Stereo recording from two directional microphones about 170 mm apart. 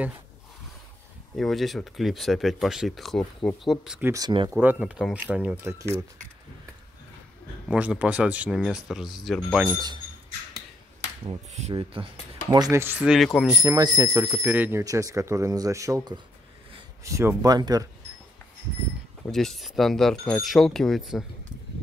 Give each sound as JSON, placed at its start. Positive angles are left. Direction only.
{"t": 1.3, "sound": "speech", "side_deg": 0}
{"t": 4.1, "sound": "speech", "side_deg": -25}
{"t": 4.6, "sound": "speech", "side_deg": -10}
{"t": 7.6, "sound": "speech", "side_deg": -5}
{"t": 11.2, "sound": "speech", "side_deg": -40}
{"t": 12.4, "sound": "speech", "side_deg": -20}
{"t": 13.3, "sound": "speech", "side_deg": 10}
{"t": 13.6, "sound": "speech", "side_deg": -20}
{"t": 14.2, "sound": "speech", "side_deg": -10}
{"t": 19.3, "sound": "speech", "side_deg": 0}